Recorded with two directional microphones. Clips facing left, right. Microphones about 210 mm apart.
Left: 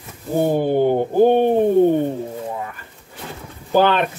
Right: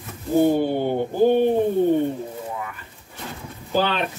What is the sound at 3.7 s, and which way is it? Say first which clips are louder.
Speech: left 6 dB; 55° left (ahead or behind).